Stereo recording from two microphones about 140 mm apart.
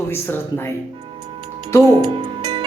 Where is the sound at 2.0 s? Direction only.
30° right (ahead or behind).